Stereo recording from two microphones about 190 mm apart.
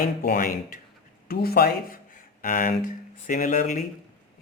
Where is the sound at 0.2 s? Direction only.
50° left (ahead or behind).